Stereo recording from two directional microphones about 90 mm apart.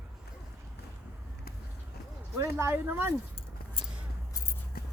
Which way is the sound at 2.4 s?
35° right (ahead or behind).